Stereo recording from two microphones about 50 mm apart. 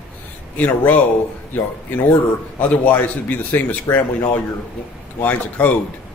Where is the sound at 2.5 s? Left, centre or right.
Left.